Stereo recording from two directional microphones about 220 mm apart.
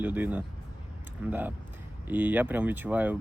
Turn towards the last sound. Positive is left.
turn(degrees=-10)  # may be behind; listen again after turning